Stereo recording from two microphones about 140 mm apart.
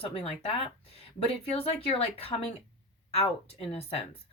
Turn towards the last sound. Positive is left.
turn(degrees=45)  # may be behind; listen again after turning